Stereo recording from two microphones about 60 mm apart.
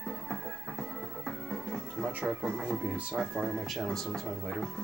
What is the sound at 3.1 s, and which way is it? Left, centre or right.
Speech, centre.